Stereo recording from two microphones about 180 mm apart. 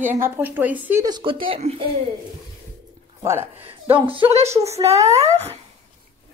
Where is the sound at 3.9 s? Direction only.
30° right (ahead or behind).